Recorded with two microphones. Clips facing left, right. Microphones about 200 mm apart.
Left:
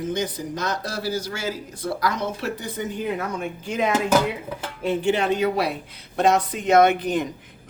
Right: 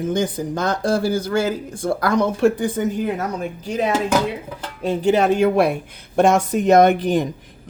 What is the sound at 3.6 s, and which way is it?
Speech, 35° right (ahead or behind).